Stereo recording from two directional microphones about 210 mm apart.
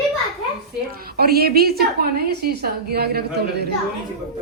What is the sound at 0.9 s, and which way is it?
A woman's voice, 45° right (ahead or behind).